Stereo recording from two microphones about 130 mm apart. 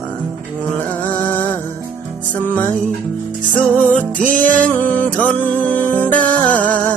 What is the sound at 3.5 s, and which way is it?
Music, 10° left (ahead or behind).